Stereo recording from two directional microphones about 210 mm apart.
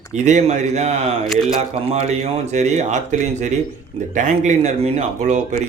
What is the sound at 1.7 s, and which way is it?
Speech, 30° right (ahead or behind).